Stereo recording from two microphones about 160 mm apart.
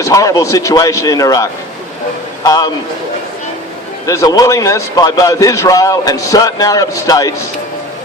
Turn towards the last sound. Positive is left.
turn(degrees=20)  # may be behind; listen again after turning